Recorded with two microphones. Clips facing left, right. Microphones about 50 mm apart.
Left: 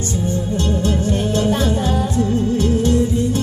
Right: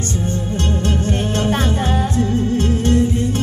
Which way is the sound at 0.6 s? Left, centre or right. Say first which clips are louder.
Left 1 dB; right.